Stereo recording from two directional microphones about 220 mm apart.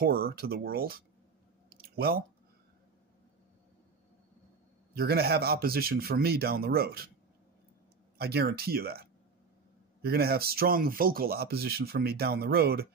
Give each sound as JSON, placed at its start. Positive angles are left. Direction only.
{"t": 0.0, "sound": "speech", "side_deg": -45}
{"t": 1.7, "sound": "a sound", "side_deg": -45}
{"t": 4.9, "sound": "speech", "side_deg": -45}
{"t": 8.2, "sound": "speech", "side_deg": -45}
{"t": 10.0, "sound": "speech", "side_deg": -45}